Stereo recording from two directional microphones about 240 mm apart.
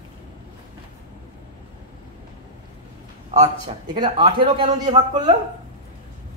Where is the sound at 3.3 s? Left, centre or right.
Right.